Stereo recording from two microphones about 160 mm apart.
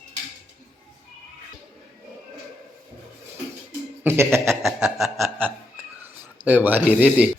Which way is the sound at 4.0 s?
15° right (ahead or behind).